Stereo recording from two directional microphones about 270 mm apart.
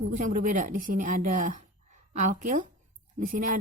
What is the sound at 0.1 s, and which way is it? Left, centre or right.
A woman's voice, right.